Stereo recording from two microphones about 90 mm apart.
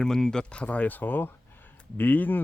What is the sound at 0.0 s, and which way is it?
Speech, 5° left (ahead or behind).